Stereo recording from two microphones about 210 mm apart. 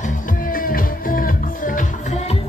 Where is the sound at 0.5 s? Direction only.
40° left (ahead or behind).